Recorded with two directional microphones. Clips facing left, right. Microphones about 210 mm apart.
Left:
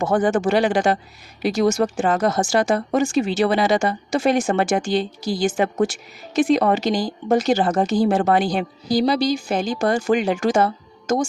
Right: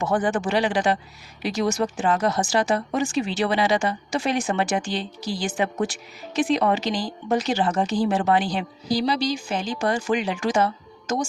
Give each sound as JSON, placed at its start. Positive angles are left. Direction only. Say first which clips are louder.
{"t": 0.0, "sound": "speech", "louder": "left 4 dB", "side_deg": 45}